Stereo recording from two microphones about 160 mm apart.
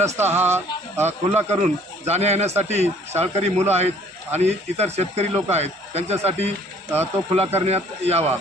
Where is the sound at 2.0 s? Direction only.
45° right (ahead or behind).